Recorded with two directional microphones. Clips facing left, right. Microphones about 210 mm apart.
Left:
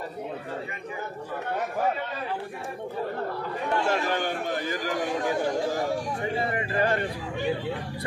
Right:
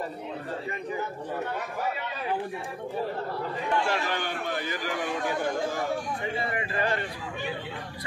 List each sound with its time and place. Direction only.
3.8 s a man's voice: 45° left (ahead or behind)